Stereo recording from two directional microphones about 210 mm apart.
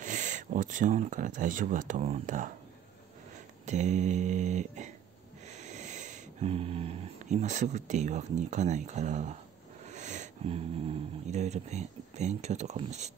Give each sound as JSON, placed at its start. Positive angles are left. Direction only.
{"t": 0.0, "sound": "speech", "side_deg": -35}
{"t": 3.6, "sound": "speech", "side_deg": -35}